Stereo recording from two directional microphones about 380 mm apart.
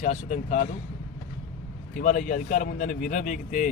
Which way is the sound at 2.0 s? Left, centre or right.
Left.